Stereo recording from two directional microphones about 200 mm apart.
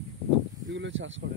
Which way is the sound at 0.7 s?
70° right (ahead or behind).